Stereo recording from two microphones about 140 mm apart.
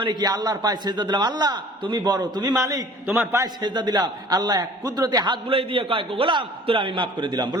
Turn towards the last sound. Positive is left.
turn(degrees=-30)  # may be behind; listen again after turning